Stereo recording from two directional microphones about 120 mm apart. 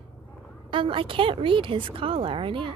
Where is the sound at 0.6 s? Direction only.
45° right (ahead or behind).